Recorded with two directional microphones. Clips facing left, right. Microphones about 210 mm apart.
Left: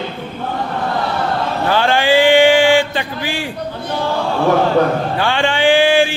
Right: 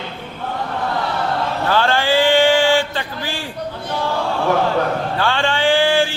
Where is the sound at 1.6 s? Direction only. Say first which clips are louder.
Left 3 dB; 15° left (ahead or behind).